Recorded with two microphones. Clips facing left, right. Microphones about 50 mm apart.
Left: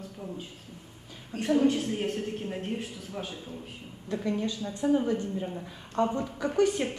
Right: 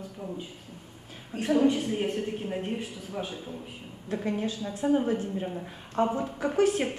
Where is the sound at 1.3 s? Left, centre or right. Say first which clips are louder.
Right 1 dB; centre.